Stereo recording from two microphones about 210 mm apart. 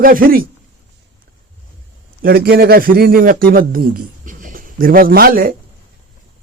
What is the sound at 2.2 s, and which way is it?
A man's voice, 45° right (ahead or behind).